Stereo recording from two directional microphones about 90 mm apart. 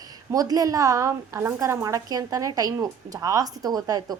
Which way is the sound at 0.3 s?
40° right (ahead or behind).